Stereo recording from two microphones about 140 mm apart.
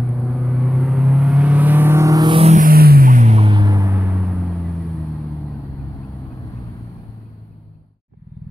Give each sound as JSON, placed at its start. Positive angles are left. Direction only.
{"t": 0.0, "sound": "vehicle", "side_deg": 0}
{"t": 2.6, "sound": "music", "side_deg": -90}
{"t": 3.4, "sound": "gong", "side_deg": -30}
{"t": 4.2, "sound": "vehicle", "side_deg": 0}